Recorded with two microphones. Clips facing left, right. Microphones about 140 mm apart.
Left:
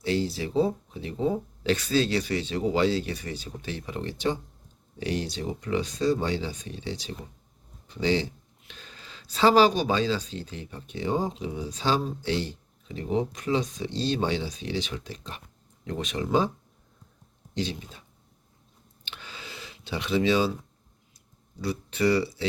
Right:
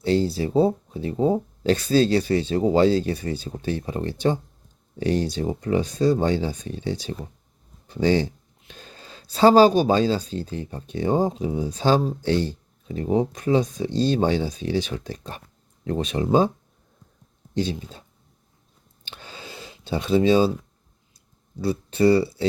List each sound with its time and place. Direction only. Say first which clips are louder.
0.0 s speech: right 6 dB; 40° right (ahead or behind)
15.8 s speech: right 6 dB; 35° right (ahead or behind)
17.6 s speech: right 6 dB; 35° right (ahead or behind)
19.1 s a sound: right 3 dB; 35° right (ahead or behind)
19.9 s speech: right 6 dB; 40° right (ahead or behind)
21.6 s speech: right 6 dB; 30° right (ahead or behind)